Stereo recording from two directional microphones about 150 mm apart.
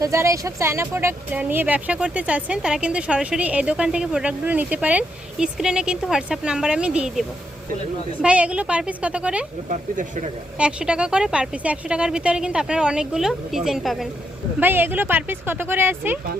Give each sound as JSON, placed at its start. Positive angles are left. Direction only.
{"t": 0.0, "sound": "speech", "side_deg": -20}
{"t": 9.6, "sound": "speech", "side_deg": -60}
{"t": 10.6, "sound": "a woman's voice", "side_deg": -5}
{"t": 14.6, "sound": "speech", "side_deg": -15}